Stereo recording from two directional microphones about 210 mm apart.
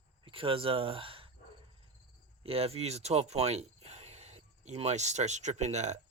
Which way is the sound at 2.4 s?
30° right (ahead or behind).